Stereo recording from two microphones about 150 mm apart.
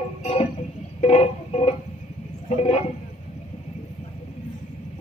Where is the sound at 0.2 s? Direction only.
40° left (ahead or behind).